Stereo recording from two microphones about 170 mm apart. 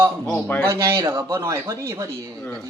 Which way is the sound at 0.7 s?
15° right (ahead or behind).